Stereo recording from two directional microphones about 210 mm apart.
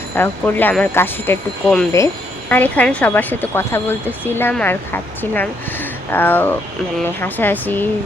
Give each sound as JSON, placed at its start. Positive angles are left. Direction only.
{"t": 0.2, "sound": "a woman's voice", "side_deg": 10}